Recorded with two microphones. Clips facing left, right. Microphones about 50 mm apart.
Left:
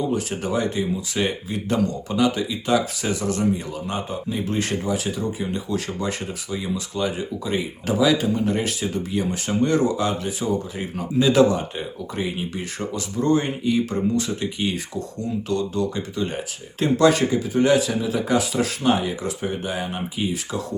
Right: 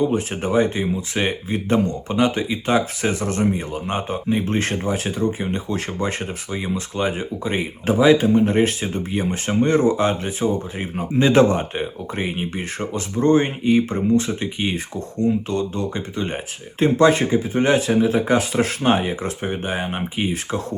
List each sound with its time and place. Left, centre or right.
0.1 s speech: right